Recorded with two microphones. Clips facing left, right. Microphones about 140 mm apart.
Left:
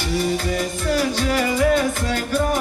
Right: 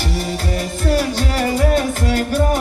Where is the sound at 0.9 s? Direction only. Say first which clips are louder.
Even; 45° right (ahead or behind).